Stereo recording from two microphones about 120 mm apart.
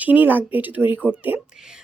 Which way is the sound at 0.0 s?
15° right (ahead or behind).